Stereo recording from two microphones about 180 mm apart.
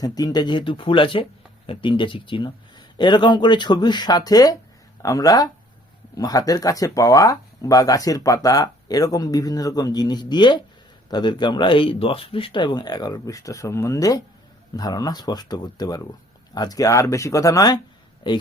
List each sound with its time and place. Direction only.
0.0 s speech: 20° left (ahead or behind)